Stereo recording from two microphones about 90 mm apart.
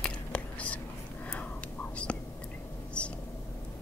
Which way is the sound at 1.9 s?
15° left (ahead or behind).